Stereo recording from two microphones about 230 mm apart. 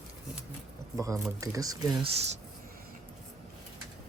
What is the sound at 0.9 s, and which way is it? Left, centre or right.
Speech, centre.